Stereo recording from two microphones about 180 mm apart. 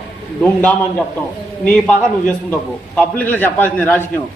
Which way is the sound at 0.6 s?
10° left (ahead or behind).